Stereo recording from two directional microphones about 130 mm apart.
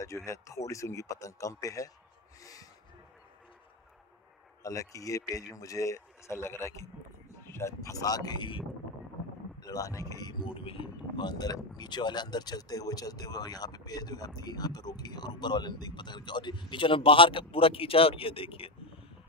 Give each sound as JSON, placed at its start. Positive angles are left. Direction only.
{"t": 0.0, "sound": "speech", "side_deg": 25}
{"t": 2.4, "sound": "snort", "side_deg": 25}
{"t": 4.6, "sound": "speech", "side_deg": 25}
{"t": 9.6, "sound": "speech", "side_deg": 25}
{"t": 10.5, "sound": "speech", "side_deg": 45}